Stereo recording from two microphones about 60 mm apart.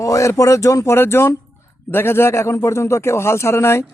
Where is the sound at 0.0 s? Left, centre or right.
Left.